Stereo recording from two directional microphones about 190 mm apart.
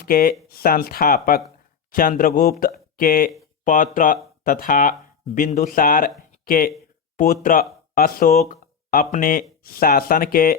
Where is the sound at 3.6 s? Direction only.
45° left (ahead or behind).